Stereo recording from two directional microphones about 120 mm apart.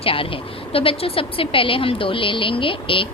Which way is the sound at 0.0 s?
50° left (ahead or behind).